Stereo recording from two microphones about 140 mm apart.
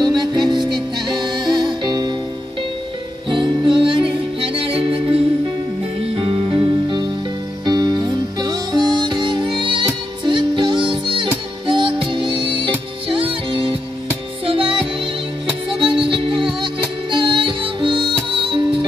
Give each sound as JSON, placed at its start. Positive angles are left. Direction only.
{"t": 0.0, "sound": "music", "side_deg": -30}
{"t": 3.3, "sound": "music", "side_deg": -35}
{"t": 15.8, "sound": "music", "side_deg": -35}